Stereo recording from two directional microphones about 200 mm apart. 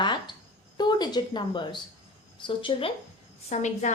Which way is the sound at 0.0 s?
25° left (ahead or behind).